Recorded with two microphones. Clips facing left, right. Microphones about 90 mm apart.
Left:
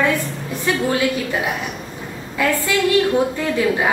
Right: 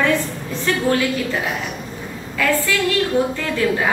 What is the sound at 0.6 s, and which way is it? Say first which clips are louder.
Speech: even; 15° left (ahead or behind).